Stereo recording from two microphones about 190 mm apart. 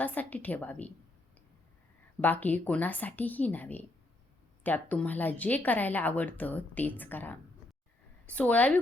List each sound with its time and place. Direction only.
0.0 s a woman's voice: 10° left (ahead or behind)
2.2 s a woman's voice: 10° left (ahead or behind)